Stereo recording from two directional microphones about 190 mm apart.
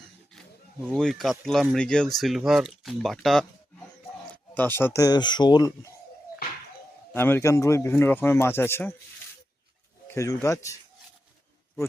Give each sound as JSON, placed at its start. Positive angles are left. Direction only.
{"t": 0.9, "sound": "speech", "side_deg": 0}
{"t": 4.3, "sound": "a sound", "side_deg": 10}
{"t": 4.9, "sound": "speech", "side_deg": 20}
{"t": 7.1, "sound": "speech", "side_deg": 10}
{"t": 10.1, "sound": "speech", "side_deg": 15}